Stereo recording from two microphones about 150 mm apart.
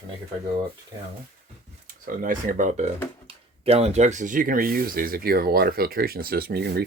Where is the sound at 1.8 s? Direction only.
65° right (ahead or behind).